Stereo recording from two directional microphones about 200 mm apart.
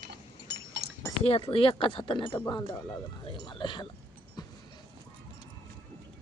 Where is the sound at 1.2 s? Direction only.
30° left (ahead or behind).